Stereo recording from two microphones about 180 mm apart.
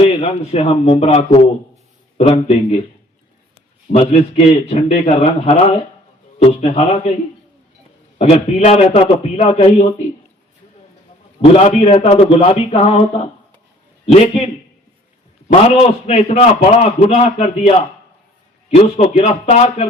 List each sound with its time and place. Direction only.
0.0 s a man's voice: 35° left (ahead or behind)
3.9 s a man's voice: 35° left (ahead or behind)
8.2 s a man's voice: 35° left (ahead or behind)
11.5 s a man's voice: 35° left (ahead or behind)
14.1 s a man's voice: 35° left (ahead or behind)